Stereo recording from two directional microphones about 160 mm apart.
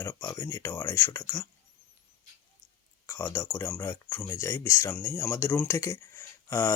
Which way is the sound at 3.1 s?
15° left (ahead or behind).